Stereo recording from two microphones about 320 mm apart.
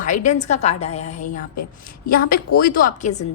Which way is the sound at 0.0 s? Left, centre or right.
Left.